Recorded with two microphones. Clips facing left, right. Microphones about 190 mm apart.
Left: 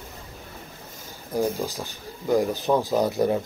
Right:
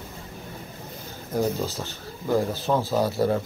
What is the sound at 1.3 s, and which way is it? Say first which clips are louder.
Speech: even; 15° left (ahead or behind).